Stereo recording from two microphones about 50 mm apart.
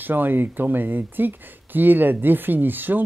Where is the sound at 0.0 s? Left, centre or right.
Right.